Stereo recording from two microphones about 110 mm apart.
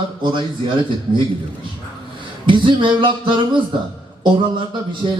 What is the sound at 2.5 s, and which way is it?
A man's voice, 50° right (ahead or behind).